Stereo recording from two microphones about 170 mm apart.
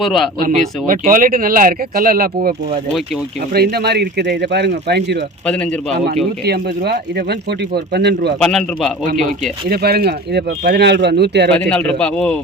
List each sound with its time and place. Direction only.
0.0 s a man's voice: centre (ahead or behind)
0.3 s speech: 55° right (ahead or behind); by 5.1 s 85° right
6.4 s speech: 70° right (ahead or behind)
8.4 s a man's voice: 5° left (ahead or behind)
9.0 s speech: 50° right (ahead or behind)
9.6 s speech: 65° right (ahead or behind)
11.5 s a man's voice: 5° left (ahead or behind)